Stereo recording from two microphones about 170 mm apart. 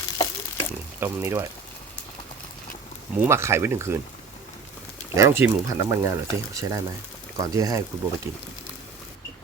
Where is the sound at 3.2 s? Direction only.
15° right (ahead or behind).